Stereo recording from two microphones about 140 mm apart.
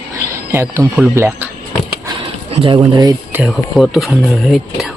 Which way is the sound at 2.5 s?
40° right (ahead or behind).